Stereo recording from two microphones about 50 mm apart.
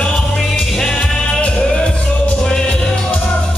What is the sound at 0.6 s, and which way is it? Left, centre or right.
Music, centre.